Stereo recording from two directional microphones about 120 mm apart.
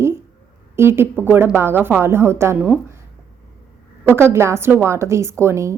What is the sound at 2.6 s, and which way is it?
Speech, 10° right (ahead or behind).